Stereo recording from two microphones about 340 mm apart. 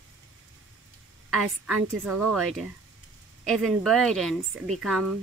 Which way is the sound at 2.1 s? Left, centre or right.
Right.